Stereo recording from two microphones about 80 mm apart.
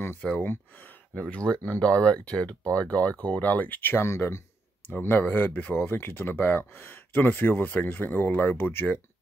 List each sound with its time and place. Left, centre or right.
0.0 s speech: left